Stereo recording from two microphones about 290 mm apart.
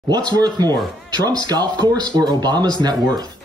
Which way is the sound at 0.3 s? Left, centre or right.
Centre.